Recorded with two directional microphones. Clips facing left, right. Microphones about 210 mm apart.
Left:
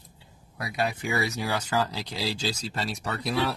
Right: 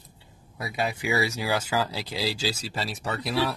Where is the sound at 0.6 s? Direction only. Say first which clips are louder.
Even; centre (ahead or behind).